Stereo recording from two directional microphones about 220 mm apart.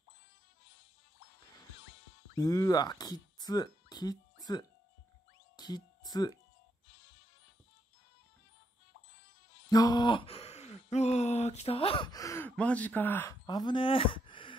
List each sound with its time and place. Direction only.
2.3 s speech: 15° left (ahead or behind)
9.7 s speech: 15° left (ahead or behind)